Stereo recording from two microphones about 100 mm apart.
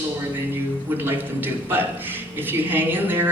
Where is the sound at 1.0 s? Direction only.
20° right (ahead or behind).